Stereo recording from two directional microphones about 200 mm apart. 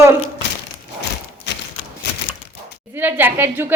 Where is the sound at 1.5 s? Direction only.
55° left (ahead or behind).